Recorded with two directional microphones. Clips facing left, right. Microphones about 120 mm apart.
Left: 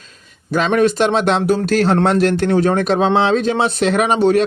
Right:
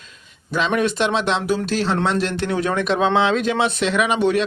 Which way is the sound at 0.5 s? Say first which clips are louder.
Left 5 dB; 45° left (ahead or behind).